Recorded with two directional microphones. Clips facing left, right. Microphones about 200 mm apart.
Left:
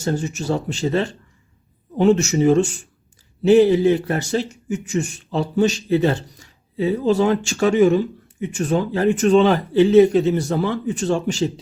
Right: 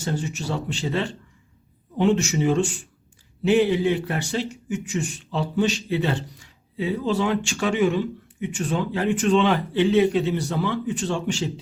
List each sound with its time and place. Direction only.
0.0 s speech: 45° left (ahead or behind)